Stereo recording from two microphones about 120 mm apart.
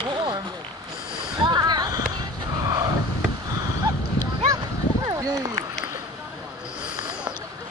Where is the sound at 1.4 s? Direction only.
35° right (ahead or behind).